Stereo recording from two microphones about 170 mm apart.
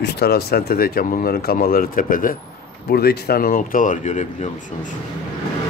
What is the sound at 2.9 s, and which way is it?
Speech, 65° left (ahead or behind).